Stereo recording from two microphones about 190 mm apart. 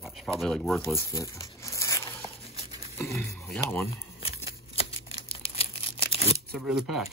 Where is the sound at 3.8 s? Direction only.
30° left (ahead or behind).